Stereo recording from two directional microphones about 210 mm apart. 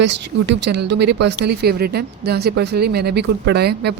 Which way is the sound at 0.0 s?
55° right (ahead or behind).